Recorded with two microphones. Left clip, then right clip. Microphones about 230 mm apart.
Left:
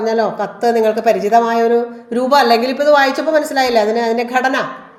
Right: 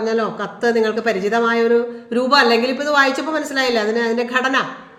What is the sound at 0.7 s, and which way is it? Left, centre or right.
A woman's voice, centre.